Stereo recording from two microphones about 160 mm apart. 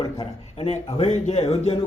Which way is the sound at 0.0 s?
30° left (ahead or behind).